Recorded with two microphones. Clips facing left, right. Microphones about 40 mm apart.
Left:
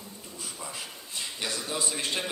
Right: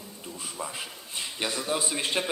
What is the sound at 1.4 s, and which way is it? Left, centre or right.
Speech, right.